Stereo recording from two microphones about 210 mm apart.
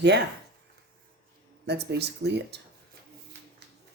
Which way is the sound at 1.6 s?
50° right (ahead or behind).